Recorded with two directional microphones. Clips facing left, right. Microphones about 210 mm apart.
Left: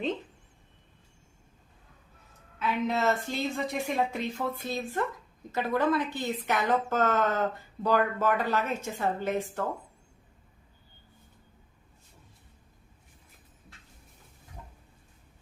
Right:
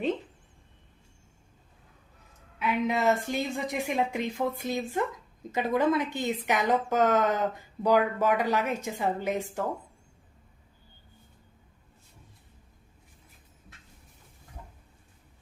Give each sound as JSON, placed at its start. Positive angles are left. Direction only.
{"t": 2.6, "sound": "a woman's voice", "side_deg": -15}